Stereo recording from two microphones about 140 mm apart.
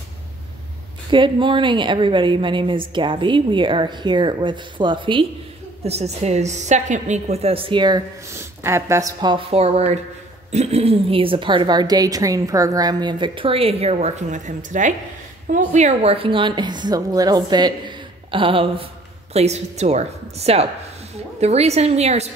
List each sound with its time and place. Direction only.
1.1 s speech: 35° right (ahead or behind)
5.9 s a woman's voice: 50° right (ahead or behind); by 8.0 s 35° right (ahead or behind)
8.4 s speech: 20° right (ahead or behind)
9.5 s a woman's voice: 45° right (ahead or behind)
19.3 s a woman's voice: 50° right (ahead or behind)